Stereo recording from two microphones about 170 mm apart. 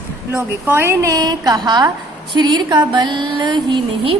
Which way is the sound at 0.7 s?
15° right (ahead or behind).